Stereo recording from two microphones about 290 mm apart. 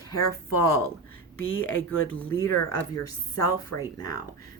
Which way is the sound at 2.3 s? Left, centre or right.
Centre.